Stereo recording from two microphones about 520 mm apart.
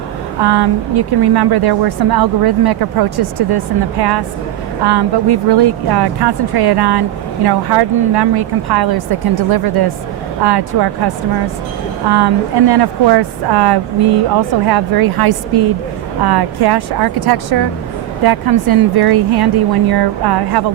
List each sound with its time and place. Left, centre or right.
0.4 s a woman's voice: right